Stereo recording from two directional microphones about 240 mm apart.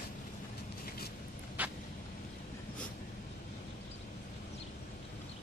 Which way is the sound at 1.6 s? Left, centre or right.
Centre.